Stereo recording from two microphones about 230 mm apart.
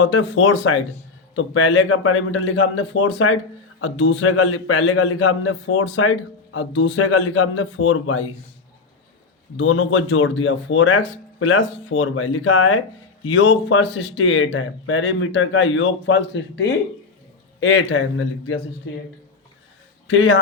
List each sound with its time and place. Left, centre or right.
0.0 s a man's voice: left
9.6 s a man's voice: left
20.1 s a man's voice: left